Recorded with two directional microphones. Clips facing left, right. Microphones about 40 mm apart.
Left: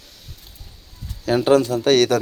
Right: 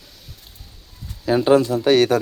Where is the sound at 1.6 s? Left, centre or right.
Right.